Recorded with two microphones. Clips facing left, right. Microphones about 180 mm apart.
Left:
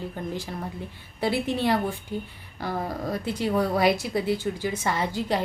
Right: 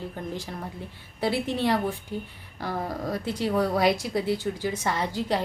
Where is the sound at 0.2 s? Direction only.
Centre (ahead or behind).